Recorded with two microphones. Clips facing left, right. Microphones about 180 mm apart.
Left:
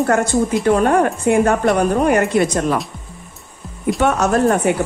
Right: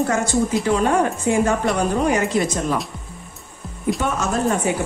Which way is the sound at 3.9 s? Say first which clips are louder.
Left 9 dB; 65° left (ahead or behind).